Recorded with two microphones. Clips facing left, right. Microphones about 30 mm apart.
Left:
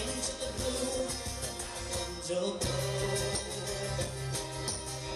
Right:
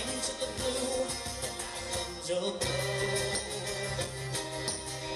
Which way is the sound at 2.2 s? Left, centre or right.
Right.